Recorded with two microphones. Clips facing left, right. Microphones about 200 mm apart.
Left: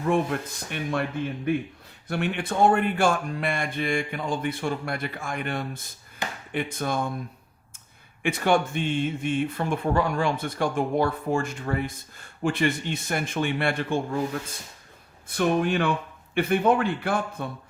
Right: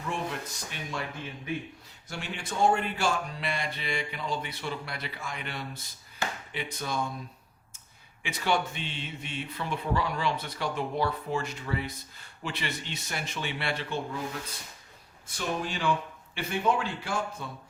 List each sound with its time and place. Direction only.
0.0 s speech: 55° left (ahead or behind)
8.2 s speech: 55° left (ahead or behind)
15.3 s speech: 60° left (ahead or behind)